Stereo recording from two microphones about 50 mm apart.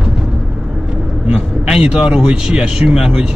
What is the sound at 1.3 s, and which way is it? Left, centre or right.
Speech, centre.